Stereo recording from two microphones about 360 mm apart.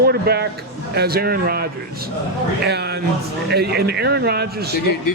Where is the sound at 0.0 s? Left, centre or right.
Right.